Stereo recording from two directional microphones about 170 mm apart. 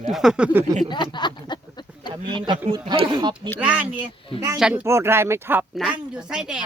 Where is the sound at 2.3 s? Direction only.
30° right (ahead or behind).